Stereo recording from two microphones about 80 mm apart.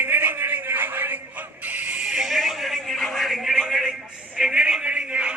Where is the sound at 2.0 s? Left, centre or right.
Centre.